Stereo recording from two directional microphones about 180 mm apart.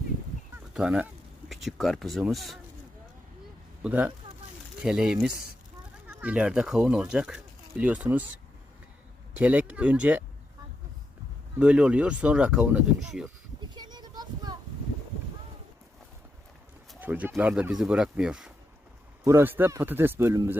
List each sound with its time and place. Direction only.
0.7 s speech: 5° right (ahead or behind)
3.8 s speech: 10° right (ahead or behind)
9.4 s speech: 10° right (ahead or behind)
11.6 s speech: 5° right (ahead or behind)
13.6 s a sound: 25° right (ahead or behind)
16.9 s speech: 10° right (ahead or behind)